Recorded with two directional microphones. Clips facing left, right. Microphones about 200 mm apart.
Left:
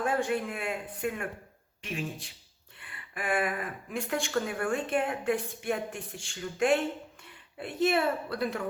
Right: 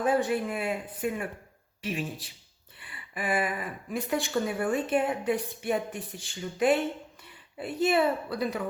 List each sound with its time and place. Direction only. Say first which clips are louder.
0.0 s speech: right 3 dB; centre (ahead or behind)